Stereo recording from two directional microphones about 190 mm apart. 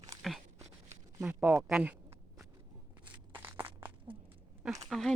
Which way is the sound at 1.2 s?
10° right (ahead or behind).